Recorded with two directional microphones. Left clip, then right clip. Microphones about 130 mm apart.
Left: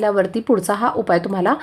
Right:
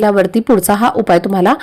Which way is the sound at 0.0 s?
35° right (ahead or behind).